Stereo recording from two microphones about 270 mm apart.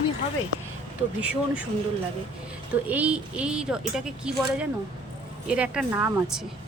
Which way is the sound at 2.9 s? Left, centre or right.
Centre.